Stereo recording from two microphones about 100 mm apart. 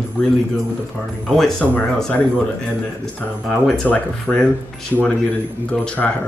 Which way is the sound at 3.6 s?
10° left (ahead or behind).